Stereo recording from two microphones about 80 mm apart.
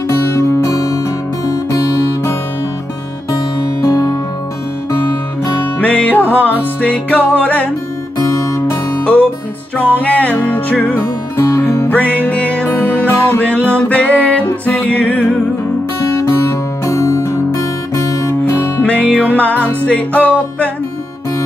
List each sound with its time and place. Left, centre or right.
0.4 s music: left
3.8 s music: left
5.8 s music: centre
8.2 s music: left
9.9 s music: centre
11.3 s music: left
11.9 s music: left
16.0 s music: left
18.4 s music: centre